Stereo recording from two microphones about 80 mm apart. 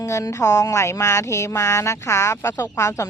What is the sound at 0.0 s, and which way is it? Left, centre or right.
A woman's voice, left.